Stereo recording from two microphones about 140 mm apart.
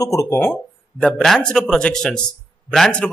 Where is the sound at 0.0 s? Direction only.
25° left (ahead or behind).